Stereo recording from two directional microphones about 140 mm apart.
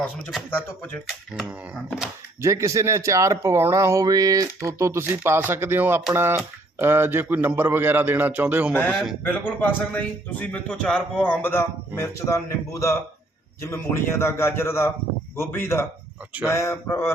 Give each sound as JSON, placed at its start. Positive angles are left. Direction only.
{"t": 0.5, "sound": "a man's voice", "side_deg": 15}
{"t": 2.4, "sound": "speech", "side_deg": -20}
{"t": 8.9, "sound": "speech", "side_deg": 0}
{"t": 9.6, "sound": "a man's voice", "side_deg": 10}